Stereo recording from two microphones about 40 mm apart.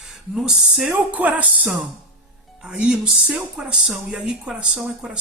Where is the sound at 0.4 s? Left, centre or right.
Centre.